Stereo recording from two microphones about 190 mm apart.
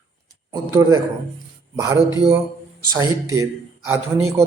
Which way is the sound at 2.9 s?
15° right (ahead or behind).